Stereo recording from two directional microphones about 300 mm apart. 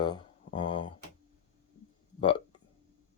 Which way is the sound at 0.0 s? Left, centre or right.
Centre.